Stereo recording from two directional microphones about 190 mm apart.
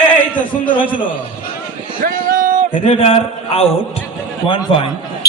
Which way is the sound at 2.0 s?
45° right (ahead or behind).